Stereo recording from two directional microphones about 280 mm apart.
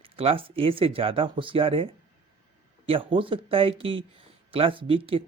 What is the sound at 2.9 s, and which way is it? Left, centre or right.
Speech, centre.